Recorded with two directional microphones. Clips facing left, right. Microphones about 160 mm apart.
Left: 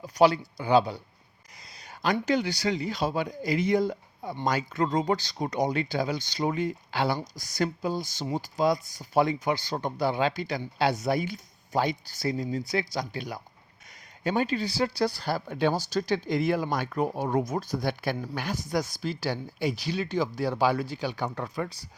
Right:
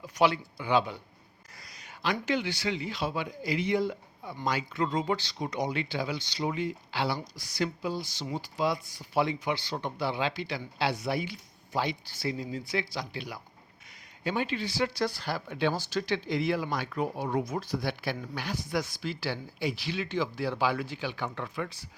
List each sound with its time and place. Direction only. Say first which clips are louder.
0.0 s speech: left 5 dB; 40° left (ahead or behind)